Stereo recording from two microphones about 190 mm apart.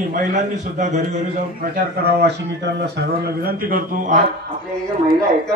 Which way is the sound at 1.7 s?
60° right (ahead or behind).